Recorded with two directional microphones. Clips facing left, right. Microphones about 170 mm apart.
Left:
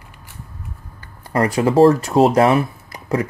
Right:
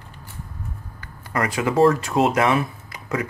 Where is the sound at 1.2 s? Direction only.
35° left (ahead or behind).